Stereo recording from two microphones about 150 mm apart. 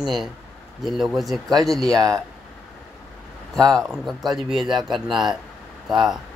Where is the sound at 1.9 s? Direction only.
25° right (ahead or behind).